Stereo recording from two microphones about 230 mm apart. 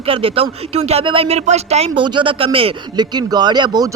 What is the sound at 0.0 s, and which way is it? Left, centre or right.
Speech, right.